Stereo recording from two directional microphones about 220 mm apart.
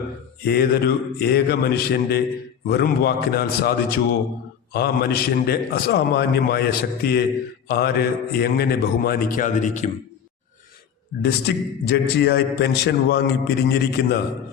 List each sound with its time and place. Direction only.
0.4 s a man's voice: 45° left (ahead or behind)
11.2 s a man's voice: 45° left (ahead or behind)